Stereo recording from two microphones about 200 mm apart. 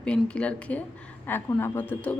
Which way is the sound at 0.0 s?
5° left (ahead or behind).